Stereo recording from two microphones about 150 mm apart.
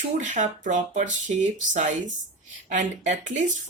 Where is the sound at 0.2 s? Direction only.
55° right (ahead or behind).